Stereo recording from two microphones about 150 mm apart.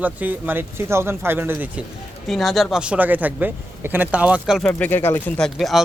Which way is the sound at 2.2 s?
Centre (ahead or behind).